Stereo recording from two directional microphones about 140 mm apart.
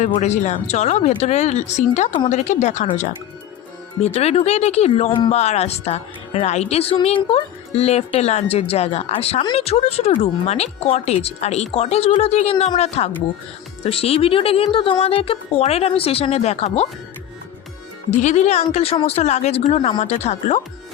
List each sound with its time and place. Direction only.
0.2 s a woman's voice: 55° left (ahead or behind)
4.0 s a woman's voice: 50° left (ahead or behind)
18.2 s a woman's voice: 55° left (ahead or behind)